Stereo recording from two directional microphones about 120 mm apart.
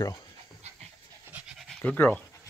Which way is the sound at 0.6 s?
65° right (ahead or behind).